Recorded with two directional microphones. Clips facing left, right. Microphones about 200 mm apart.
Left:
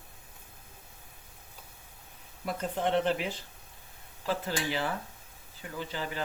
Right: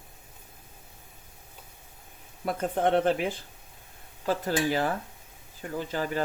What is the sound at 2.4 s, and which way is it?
Speech, 50° right (ahead or behind).